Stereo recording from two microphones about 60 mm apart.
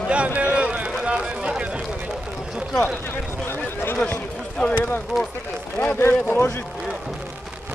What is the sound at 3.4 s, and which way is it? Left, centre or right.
Speech, left.